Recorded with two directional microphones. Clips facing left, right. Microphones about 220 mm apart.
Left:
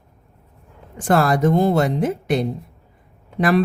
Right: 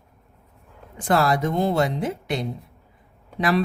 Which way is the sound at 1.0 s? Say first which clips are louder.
Left 3 dB; 50° left (ahead or behind).